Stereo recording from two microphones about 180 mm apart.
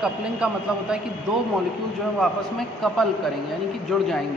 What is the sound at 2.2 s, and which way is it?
A man's voice, centre (ahead or behind).